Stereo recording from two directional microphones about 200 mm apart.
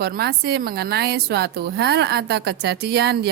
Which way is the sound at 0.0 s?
50° right (ahead or behind).